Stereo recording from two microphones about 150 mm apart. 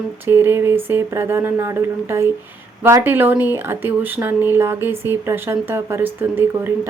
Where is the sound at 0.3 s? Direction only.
15° right (ahead or behind).